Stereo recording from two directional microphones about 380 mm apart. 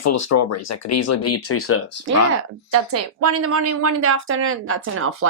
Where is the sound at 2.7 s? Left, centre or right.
Right.